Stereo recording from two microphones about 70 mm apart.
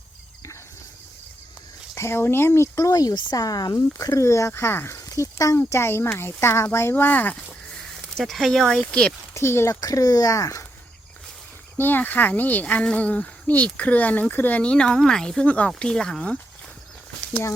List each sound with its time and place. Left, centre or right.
2.0 s speech: left
2.7 s speech: left
3.8 s speech: left
5.0 s speech: left
8.1 s speech: centre
9.3 s speech: left
9.8 s speech: left
11.8 s speech: left; by 16.4 s centre